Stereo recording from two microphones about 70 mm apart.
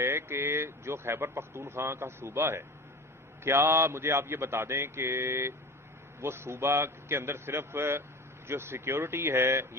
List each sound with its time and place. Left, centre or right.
0.0 s speech: right